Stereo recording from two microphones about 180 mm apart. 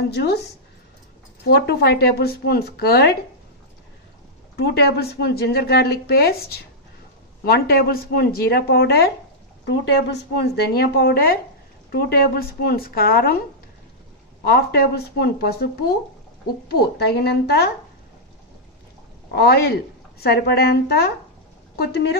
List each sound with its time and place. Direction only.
0.1 s a woman's voice: 65° left (ahead or behind)
1.4 s a woman's voice: 65° left (ahead or behind)
4.6 s a woman's voice: 65° left (ahead or behind)
14.4 s a woman's voice: 60° left (ahead or behind)
19.3 s a woman's voice: 60° left (ahead or behind)